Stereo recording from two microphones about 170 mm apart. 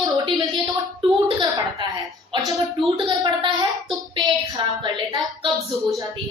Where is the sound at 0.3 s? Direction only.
30° right (ahead or behind).